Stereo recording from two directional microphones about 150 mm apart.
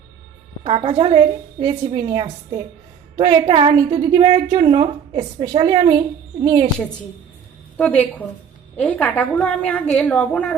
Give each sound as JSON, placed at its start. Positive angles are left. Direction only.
{"t": 0.6, "sound": "a woman's voice", "side_deg": -35}
{"t": 7.8, "sound": "a woman's voice", "side_deg": 10}